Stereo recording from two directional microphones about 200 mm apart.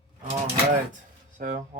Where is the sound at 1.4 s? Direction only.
40° right (ahead or behind).